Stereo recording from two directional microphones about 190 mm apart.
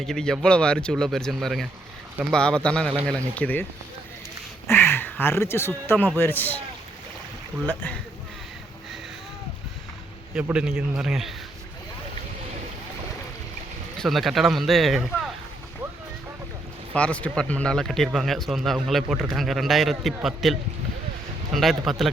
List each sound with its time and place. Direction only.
0.0 s speech: 5° left (ahead or behind)
10.3 s speech: 5° right (ahead or behind)
14.0 s speech: centre (ahead or behind)
16.9 s speech: 5° left (ahead or behind)